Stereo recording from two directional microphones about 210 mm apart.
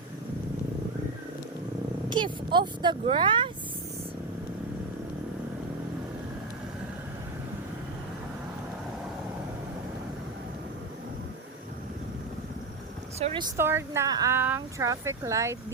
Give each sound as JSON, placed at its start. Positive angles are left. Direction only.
{"t": 2.0, "sound": "speech", "side_deg": -20}
{"t": 13.1, "sound": "a sound", "side_deg": -25}
{"t": 13.6, "sound": "speech", "side_deg": -10}